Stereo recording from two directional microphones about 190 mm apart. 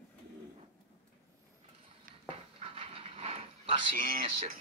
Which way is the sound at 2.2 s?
30° right (ahead or behind).